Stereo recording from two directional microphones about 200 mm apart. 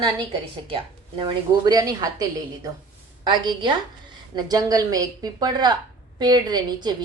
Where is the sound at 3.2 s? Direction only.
20° right (ahead or behind).